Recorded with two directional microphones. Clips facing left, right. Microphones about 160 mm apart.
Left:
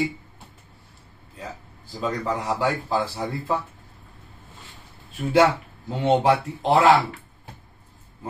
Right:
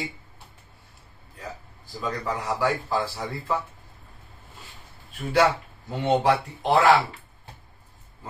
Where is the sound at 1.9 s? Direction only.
20° left (ahead or behind).